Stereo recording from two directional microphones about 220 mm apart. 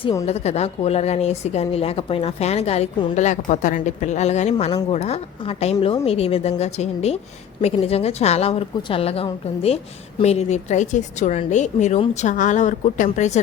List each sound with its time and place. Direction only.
0.0 s a woman's voice: 15° left (ahead or behind)
0.3 s a woman's voice: 30° left (ahead or behind)